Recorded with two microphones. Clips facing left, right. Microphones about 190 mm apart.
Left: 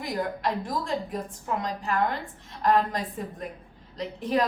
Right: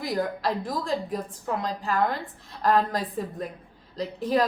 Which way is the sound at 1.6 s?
35° right (ahead or behind).